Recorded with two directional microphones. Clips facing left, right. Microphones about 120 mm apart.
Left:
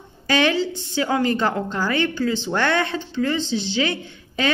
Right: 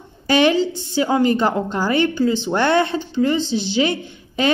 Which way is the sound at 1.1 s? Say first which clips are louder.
Right 4 dB; 15° right (ahead or behind).